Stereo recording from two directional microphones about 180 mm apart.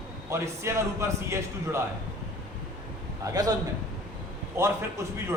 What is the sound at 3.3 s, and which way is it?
Speech, 20° right (ahead or behind).